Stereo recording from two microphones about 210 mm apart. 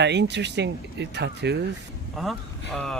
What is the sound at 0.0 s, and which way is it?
Speech, 55° right (ahead or behind).